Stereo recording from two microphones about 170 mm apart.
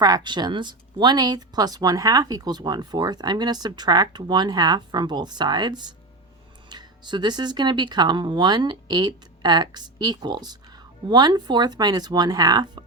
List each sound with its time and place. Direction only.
0.0 s speech: 25° right (ahead or behind)